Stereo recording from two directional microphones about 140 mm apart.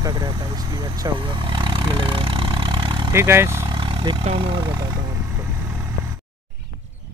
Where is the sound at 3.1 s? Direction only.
15° right (ahead or behind).